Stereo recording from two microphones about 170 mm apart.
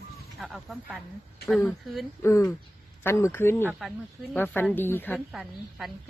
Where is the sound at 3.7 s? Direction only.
Centre (ahead or behind).